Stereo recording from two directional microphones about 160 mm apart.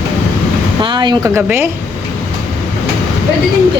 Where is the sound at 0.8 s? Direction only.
30° right (ahead or behind).